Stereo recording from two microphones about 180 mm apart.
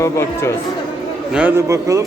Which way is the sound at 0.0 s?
15° left (ahead or behind).